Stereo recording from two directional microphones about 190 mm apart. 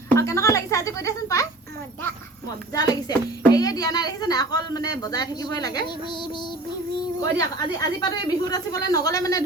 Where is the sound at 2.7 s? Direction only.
20° left (ahead or behind).